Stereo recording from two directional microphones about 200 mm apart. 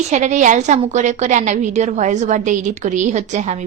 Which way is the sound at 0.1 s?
35° right (ahead or behind).